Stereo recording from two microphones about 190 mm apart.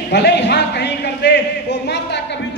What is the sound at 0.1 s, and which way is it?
Speech, 65° left (ahead or behind).